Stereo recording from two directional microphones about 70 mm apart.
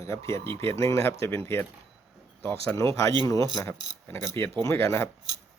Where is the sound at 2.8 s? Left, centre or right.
Left.